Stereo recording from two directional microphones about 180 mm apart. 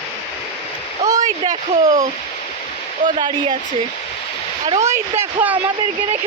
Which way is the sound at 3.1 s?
25° right (ahead or behind).